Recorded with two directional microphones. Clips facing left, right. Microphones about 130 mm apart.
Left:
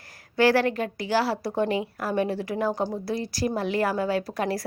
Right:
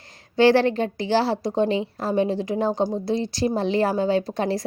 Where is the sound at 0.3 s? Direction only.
25° right (ahead or behind).